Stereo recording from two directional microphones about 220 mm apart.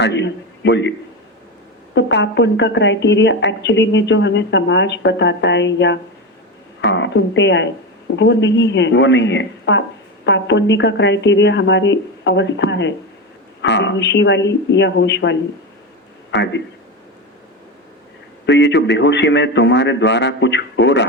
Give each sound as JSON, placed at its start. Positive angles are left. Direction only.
{"t": 0.0, "sound": "a man's voice", "side_deg": 55}
{"t": 2.0, "sound": "a woman's voice", "side_deg": 55}
{"t": 18.4, "sound": "a woman's voice", "side_deg": 55}